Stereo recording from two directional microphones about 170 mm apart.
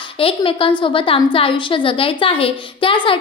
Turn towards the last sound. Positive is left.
turn(degrees=30)  # may be behind; listen again after turning